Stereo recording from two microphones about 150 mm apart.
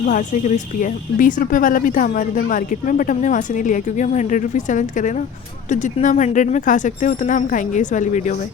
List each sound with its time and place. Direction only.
0.0 s speech: 55° left (ahead or behind)